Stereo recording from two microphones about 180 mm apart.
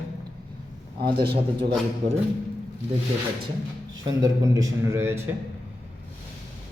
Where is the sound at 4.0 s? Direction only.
20° right (ahead or behind).